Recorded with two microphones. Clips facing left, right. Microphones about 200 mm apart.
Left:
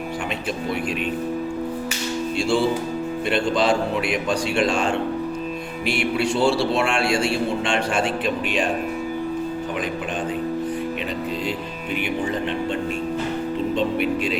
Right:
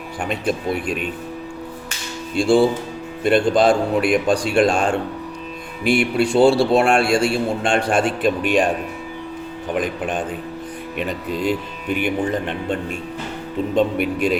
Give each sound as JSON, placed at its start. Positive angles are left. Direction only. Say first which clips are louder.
{"t": 0.3, "sound": "a man's voice", "louder": "right 8 dB", "side_deg": -50}
{"t": 3.2, "sound": "a man's voice", "louder": "right 6 dB", "side_deg": -45}
{"t": 11.9, "sound": "a man's voice", "louder": "right 3 dB", "side_deg": -50}
{"t": 13.7, "sound": "a man's voice", "louder": "right 5 dB", "side_deg": -50}